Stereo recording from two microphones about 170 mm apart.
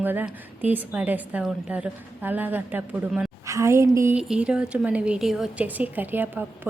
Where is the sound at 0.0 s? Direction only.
10° right (ahead or behind).